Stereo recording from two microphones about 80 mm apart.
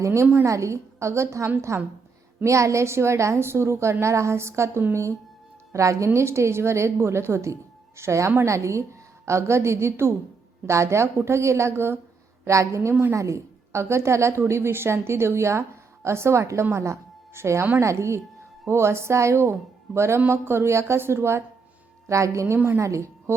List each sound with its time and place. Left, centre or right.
0.0 s a woman's voice: right
12.9 s a woman's voice: right
13.1 s a woman's voice: right
22.5 s a woman's voice: right
22.8 s a woman's voice: right